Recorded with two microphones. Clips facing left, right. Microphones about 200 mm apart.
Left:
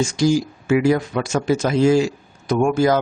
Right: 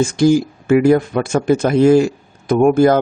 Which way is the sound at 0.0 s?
55° right (ahead or behind).